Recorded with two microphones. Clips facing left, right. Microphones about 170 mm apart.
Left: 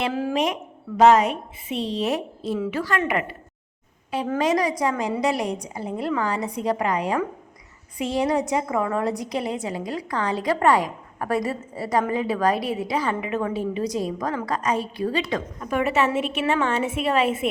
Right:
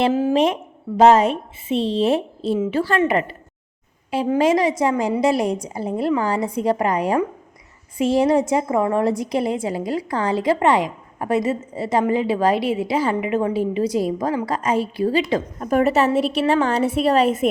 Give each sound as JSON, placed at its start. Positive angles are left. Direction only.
{"t": 0.0, "sound": "a woman's voice", "side_deg": -20}
{"t": 4.4, "sound": "a woman's voice", "side_deg": -25}